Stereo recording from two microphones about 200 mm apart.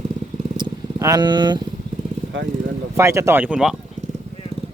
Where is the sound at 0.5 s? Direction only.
20° right (ahead or behind).